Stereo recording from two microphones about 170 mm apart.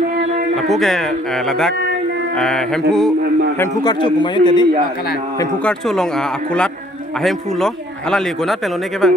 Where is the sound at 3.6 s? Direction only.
25° left (ahead or behind).